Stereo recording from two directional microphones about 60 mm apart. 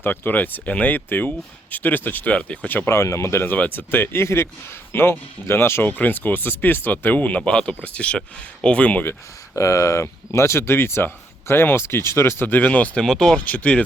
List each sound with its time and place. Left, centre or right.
0.0 s speech: left
2.6 s speech: left
2.9 s speech: left
3.4 s speech: left
9.6 s speech: left
13.0 s speech: centre
13.4 s speech: left